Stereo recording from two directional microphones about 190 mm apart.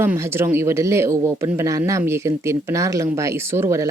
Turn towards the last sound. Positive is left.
turn(degrees=-15)  # may be behind; listen again after turning